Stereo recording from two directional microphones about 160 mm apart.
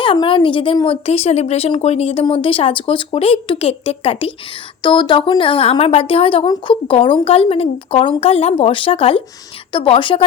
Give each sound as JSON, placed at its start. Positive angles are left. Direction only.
{"t": 0.0, "sound": "a woman's voice", "side_deg": 35}